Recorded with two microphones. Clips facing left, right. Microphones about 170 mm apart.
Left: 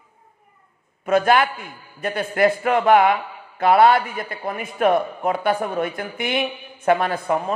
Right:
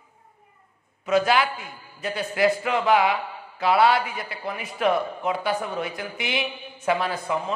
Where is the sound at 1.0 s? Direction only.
55° left (ahead or behind).